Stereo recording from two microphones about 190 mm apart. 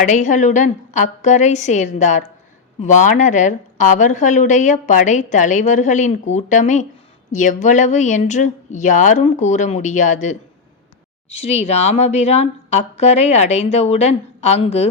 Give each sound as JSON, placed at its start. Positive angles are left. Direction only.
{"t": 0.0, "sound": "a woman's voice", "side_deg": 40}
{"t": 11.3, "sound": "a woman's voice", "side_deg": 35}